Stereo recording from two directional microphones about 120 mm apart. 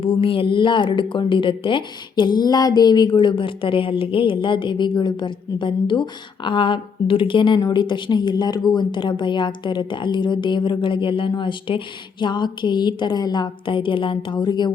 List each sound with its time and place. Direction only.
0.0 s a woman's voice: 50° left (ahead or behind)